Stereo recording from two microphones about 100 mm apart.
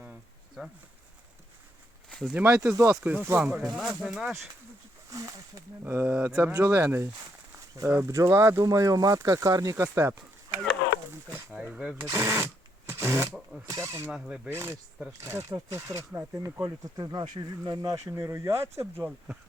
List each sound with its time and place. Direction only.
2.0 s a sound: 5° left (ahead or behind)
2.3 s speech: 15° right (ahead or behind)
3.8 s speech: 5° right (ahead or behind)
5.1 s speech: 35° right (ahead or behind)
5.8 s speech: 20° right (ahead or behind)
11.1 s a sound: 20° right (ahead or behind)
11.5 s speech: 10° right (ahead or behind)
11.9 s speech: 30° right (ahead or behind)
14.1 s speech: 10° right (ahead or behind)
14.5 s speech: 25° right (ahead or behind)
17.0 s speech: 45° right (ahead or behind)
17.6 s speech: 35° right (ahead or behind)